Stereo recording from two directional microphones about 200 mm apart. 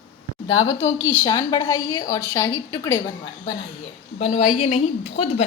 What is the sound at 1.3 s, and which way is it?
A woman's voice, 20° left (ahead or behind).